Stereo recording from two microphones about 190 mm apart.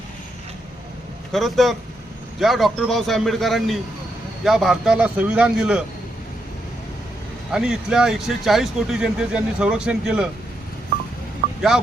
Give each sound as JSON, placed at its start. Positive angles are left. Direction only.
{"t": 1.3, "sound": "speech", "side_deg": 0}
{"t": 7.5, "sound": "speech", "side_deg": -5}
{"t": 11.4, "sound": "vehicle", "side_deg": -55}